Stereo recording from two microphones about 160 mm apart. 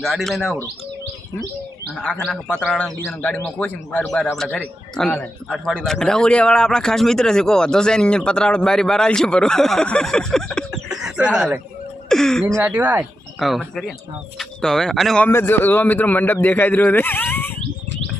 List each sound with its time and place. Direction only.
0.0 s a man's voice: centre (ahead or behind)
2.0 s a man's voice: 5° left (ahead or behind)
12.5 s speech: 10° right (ahead or behind)
13.4 s a man's voice: centre (ahead or behind)